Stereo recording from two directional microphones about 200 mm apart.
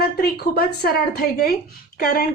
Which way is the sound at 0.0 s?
50° left (ahead or behind).